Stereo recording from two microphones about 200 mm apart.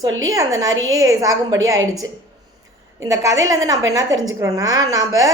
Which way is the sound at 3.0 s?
15° right (ahead or behind).